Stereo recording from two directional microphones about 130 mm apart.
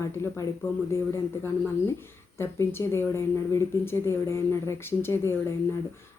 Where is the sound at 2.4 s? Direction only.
20° left (ahead or behind).